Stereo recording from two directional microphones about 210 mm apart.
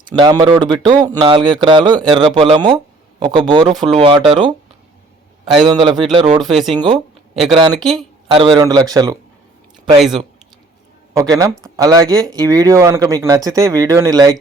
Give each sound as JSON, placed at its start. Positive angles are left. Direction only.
{"t": 0.2, "sound": "speech", "side_deg": -20}
{"t": 5.6, "sound": "speech", "side_deg": -20}
{"t": 6.4, "sound": "speech", "side_deg": 0}
{"t": 6.7, "sound": "speech", "side_deg": -25}
{"t": 10.0, "sound": "speech", "side_deg": 0}
{"t": 11.1, "sound": "speech", "side_deg": -15}